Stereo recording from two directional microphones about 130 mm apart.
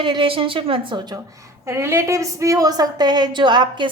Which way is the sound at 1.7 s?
20° right (ahead or behind).